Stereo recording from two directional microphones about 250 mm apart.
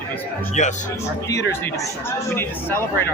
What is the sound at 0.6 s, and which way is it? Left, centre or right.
Speech, left.